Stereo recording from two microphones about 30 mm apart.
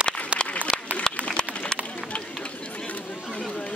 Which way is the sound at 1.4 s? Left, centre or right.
Left.